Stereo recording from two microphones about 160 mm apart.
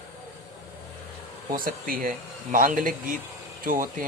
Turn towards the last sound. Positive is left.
turn(degrees=-60)  # may be behind; listen again after turning